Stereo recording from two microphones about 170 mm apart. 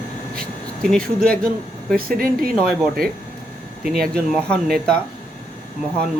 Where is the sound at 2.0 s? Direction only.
60° right (ahead or behind).